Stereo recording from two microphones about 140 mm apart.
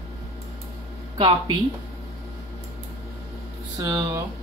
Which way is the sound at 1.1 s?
35° right (ahead or behind).